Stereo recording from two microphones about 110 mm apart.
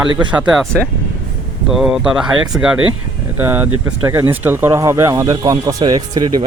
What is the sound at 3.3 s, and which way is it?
Speech, 20° right (ahead or behind).